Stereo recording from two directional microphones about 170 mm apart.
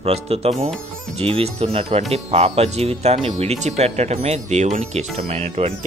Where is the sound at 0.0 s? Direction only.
35° right (ahead or behind).